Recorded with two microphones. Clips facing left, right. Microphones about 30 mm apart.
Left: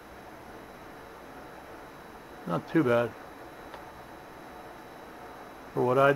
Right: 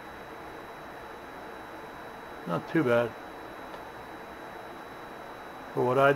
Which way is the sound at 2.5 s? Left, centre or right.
Centre.